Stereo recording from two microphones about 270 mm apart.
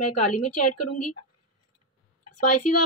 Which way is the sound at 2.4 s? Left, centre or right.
Left.